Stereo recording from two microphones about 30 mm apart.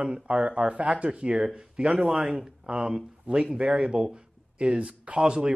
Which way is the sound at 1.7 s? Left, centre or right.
Right.